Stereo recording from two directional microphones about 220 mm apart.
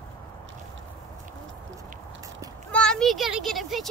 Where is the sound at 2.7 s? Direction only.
5° left (ahead or behind).